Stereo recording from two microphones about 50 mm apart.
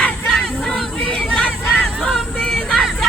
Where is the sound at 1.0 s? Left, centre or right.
Centre.